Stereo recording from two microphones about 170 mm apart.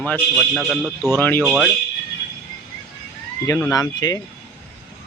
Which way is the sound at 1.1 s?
10° left (ahead or behind).